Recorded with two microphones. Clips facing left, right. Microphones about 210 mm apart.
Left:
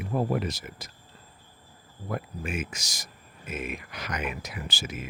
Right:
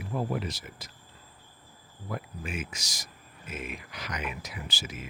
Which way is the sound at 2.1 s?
55° left (ahead or behind).